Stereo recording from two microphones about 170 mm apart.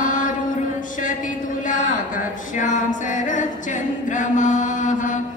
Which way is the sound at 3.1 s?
45° left (ahead or behind).